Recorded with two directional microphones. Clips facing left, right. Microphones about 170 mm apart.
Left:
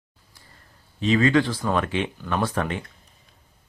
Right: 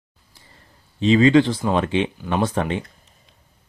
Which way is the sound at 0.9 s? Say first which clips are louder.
Right 5 dB; 25° right (ahead or behind).